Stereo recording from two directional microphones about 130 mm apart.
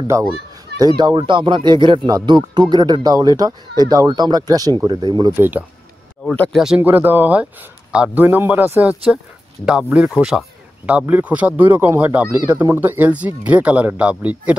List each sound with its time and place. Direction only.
0.1 s a child's voice: 25° right (ahead or behind)
6.5 s speech: 5° right (ahead or behind)
6.8 s speech: 15° right (ahead or behind)